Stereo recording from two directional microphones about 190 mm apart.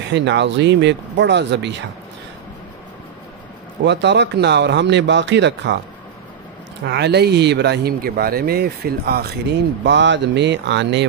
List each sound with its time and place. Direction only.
0.1 s speech: 65° right (ahead or behind)
3.8 s speech: 65° right (ahead or behind)
6.9 s speech: 60° right (ahead or behind)
9.8 s speech: 70° right (ahead or behind)